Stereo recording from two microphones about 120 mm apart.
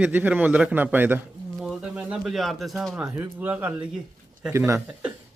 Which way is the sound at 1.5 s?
10° right (ahead or behind).